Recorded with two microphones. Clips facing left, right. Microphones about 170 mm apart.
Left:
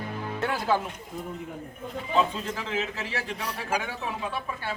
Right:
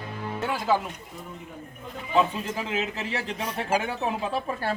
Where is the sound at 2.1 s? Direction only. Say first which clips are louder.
Right 2 dB; 15° right (ahead or behind).